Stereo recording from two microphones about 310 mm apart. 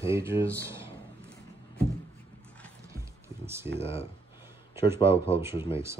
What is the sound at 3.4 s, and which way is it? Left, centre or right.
Speech, centre.